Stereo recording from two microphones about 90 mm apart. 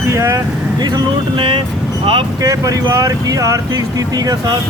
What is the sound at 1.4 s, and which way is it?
Speech, 80° right.